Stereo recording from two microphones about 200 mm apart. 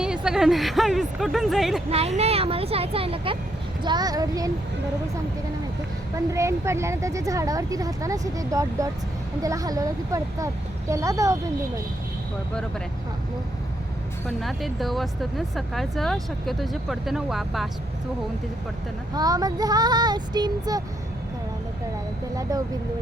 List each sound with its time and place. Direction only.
0.0 s speech: 5° right (ahead or behind)
1.9 s child singing: 30° right (ahead or behind)
6.1 s speech: 15° right (ahead or behind)
14.3 s speech: centre (ahead or behind)
19.1 s child singing: 20° right (ahead or behind)